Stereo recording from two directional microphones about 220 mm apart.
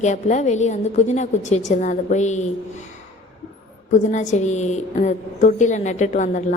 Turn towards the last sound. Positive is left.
turn(degrees=35)  # may be behind; listen again after turning